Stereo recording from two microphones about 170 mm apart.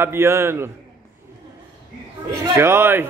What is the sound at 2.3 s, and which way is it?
Speech, 15° right (ahead or behind).